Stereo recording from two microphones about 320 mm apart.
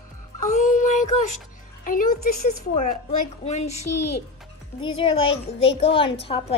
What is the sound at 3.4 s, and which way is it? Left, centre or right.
Speech, left.